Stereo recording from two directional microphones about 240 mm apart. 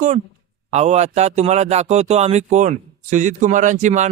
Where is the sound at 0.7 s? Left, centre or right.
Right.